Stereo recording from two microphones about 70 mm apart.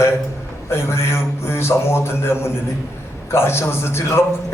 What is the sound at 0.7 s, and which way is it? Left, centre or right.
A man's voice, left.